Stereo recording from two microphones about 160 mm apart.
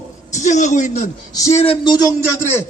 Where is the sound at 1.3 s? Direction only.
20° left (ahead or behind).